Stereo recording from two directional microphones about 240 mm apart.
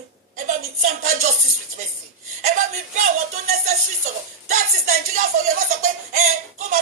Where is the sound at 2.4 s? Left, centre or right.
Right.